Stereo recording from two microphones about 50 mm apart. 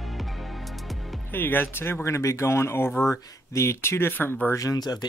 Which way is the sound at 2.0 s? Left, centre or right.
Left.